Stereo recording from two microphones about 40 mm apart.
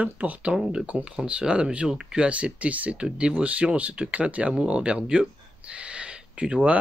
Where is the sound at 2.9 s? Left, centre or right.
Right.